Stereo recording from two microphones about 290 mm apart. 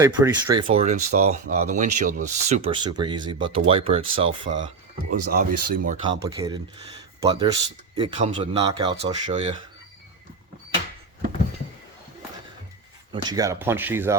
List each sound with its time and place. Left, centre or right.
0.0 s speech: centre
4.3 s speech: right
5.3 s speech: right
6.0 s speech: centre
13.2 s speech: centre